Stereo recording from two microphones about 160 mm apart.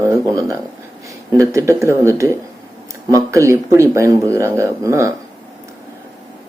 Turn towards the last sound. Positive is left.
turn(degrees=-20)  # may be behind; listen again after turning